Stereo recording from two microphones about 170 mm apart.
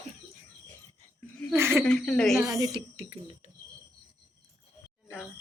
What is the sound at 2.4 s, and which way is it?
Speech, 20° right (ahead or behind).